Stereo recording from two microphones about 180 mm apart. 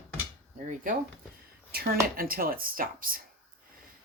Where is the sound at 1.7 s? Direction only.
55° right (ahead or behind).